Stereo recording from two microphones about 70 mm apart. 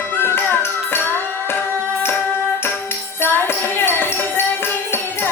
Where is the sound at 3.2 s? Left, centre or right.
Left.